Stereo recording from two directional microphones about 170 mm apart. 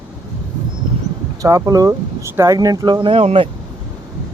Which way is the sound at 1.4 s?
20° right (ahead or behind).